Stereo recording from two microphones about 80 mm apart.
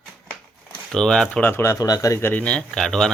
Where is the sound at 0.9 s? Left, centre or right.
Centre.